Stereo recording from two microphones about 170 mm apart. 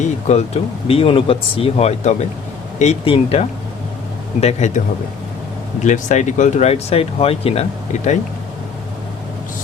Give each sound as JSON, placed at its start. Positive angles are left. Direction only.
{"t": 0.3, "sound": "speech", "side_deg": 40}
{"t": 5.8, "sound": "speech", "side_deg": 45}